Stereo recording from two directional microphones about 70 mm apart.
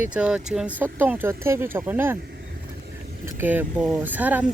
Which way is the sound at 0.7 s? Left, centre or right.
Right.